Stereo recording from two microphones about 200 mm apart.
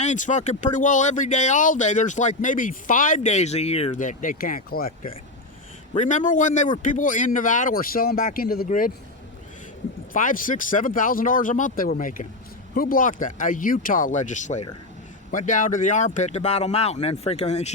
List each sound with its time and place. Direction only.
0.0 s speech: 35° left (ahead or behind)
6.0 s speech: 40° left (ahead or behind)
10.1 s speech: 40° left (ahead or behind)